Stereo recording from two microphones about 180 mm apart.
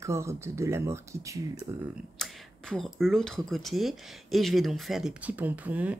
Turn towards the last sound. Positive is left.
turn(degrees=-10)  # may be behind; listen again after turning